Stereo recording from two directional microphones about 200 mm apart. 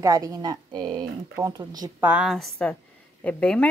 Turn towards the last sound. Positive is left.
turn(degrees=5)  # may be behind; listen again after turning